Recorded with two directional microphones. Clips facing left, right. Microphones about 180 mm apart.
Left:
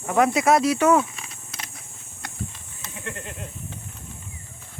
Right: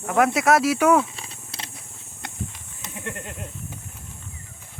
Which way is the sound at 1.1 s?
30° right (ahead or behind).